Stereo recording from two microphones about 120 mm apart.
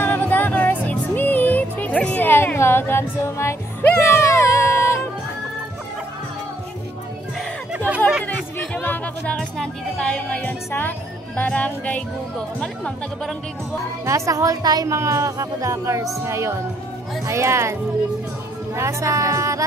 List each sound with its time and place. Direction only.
0.0 s music: 15° left (ahead or behind)
8.8 s speech: 15° left (ahead or behind)
14.0 s a woman's voice: 25° right (ahead or behind)
18.8 s a woman's voice: 25° right (ahead or behind)